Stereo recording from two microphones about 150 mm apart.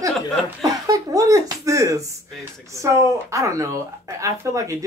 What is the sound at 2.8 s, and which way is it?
Speech, 20° right (ahead or behind).